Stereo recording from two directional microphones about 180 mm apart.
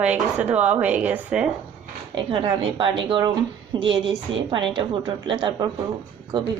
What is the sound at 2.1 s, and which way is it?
A woman's voice, 30° right (ahead or behind).